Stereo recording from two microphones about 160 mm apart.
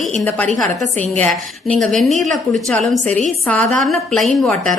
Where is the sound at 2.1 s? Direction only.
50° right (ahead or behind).